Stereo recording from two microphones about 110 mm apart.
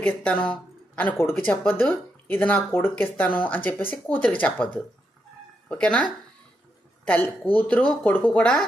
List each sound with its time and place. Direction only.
0.0 s a woman's voice: 10° left (ahead or behind)